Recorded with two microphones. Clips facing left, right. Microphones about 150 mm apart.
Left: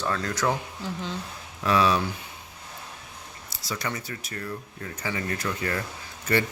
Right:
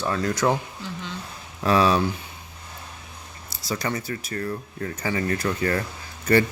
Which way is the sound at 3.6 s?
35° right (ahead or behind).